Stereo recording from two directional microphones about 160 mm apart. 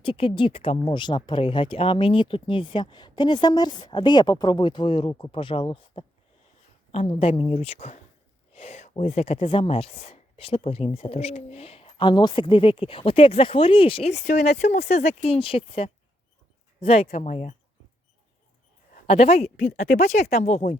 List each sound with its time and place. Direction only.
0.0 s speech: 35° left (ahead or behind); by 17.5 s 50° left (ahead or behind)
19.0 s speech: 45° left (ahead or behind)